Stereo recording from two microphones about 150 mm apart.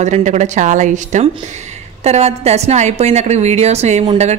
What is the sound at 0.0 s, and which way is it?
A woman's voice, 50° right (ahead or behind).